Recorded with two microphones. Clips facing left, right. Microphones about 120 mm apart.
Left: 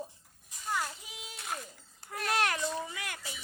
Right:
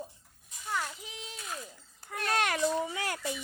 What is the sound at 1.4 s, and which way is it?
Speech, 60° left (ahead or behind).